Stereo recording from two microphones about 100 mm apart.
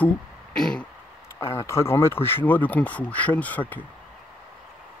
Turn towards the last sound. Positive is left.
turn(degrees=15)  # may be behind; listen again after turning